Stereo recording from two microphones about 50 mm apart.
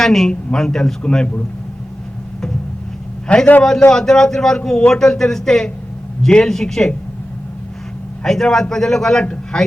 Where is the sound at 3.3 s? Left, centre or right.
Left.